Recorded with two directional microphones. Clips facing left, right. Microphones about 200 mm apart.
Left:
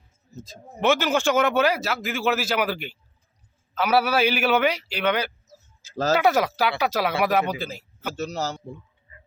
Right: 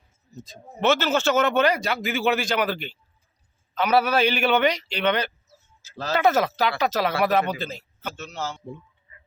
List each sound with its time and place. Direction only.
0.3 s a man's voice: centre (ahead or behind)
0.8 s speech: 10° left (ahead or behind)
5.5 s a sound: 40° left (ahead or behind)
6.1 s speech: 10° left (ahead or behind)
8.1 s a man's voice: 40° left (ahead or behind)